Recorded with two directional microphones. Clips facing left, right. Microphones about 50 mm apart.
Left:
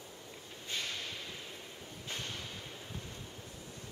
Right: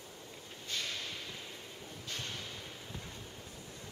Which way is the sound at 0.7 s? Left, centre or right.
Centre.